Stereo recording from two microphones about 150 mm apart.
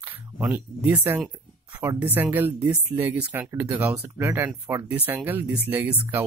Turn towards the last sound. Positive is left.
turn(degrees=-15)  # may be behind; listen again after turning